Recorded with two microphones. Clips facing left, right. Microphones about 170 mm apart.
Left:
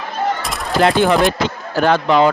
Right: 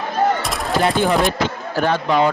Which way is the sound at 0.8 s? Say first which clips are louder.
Left 4 dB; 80° left.